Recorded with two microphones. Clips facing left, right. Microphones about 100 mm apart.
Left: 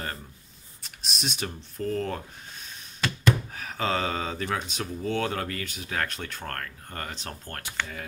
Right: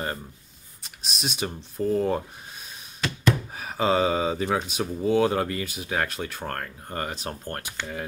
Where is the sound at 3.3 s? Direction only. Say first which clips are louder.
Right 1 dB; 10° right (ahead or behind).